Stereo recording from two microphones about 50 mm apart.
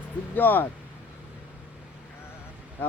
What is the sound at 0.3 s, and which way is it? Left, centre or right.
Speech, left.